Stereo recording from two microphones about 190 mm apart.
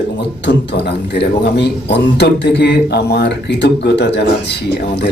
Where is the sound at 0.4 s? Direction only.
65° left (ahead or behind).